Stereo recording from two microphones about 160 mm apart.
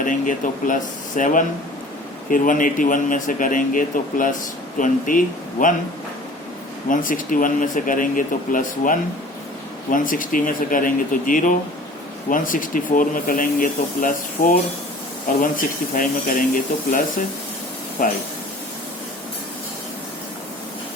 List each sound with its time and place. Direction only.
0.0 s speech: 55° left (ahead or behind)
6.9 s speech: 55° left (ahead or behind)
18.0 s speech: 60° left (ahead or behind)